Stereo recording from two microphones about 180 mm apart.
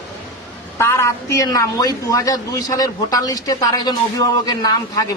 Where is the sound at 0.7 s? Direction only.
15° left (ahead or behind).